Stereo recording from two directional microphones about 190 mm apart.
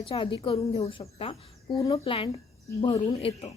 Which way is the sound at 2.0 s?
30° left (ahead or behind).